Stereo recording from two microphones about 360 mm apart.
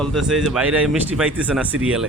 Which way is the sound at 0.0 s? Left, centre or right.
Centre.